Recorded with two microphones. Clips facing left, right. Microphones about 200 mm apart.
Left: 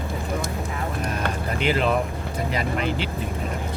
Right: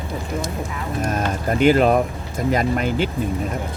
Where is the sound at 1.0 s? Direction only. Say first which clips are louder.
Right 7 dB; 45° right (ahead or behind).